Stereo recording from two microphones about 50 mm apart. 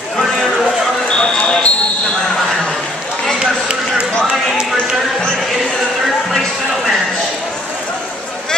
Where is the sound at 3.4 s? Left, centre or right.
Centre.